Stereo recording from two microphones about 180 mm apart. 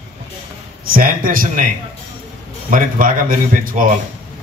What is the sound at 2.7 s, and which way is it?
Speech, 50° right (ahead or behind).